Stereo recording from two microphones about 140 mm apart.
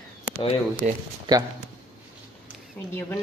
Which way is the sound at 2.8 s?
10° left (ahead or behind).